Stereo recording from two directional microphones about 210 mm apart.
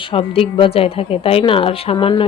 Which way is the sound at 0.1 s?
25° left (ahead or behind).